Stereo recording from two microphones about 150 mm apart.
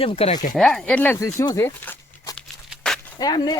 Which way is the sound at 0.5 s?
5° left (ahead or behind).